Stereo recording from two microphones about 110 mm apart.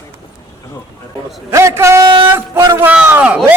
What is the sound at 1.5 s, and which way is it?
Speech, 25° right (ahead or behind).